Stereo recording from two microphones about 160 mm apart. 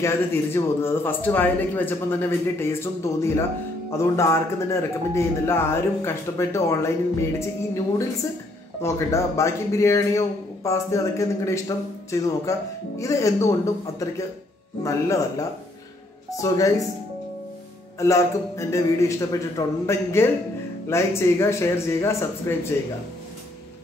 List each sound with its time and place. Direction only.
0.8 s a man's voice: 10° left (ahead or behind)
17.9 s a man's voice: 20° left (ahead or behind)